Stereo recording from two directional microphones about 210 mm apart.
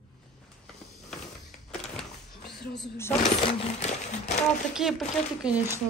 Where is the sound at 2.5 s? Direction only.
50° left (ahead or behind).